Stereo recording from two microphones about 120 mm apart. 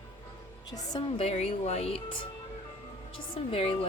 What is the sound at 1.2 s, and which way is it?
Speech, 60° left (ahead or behind).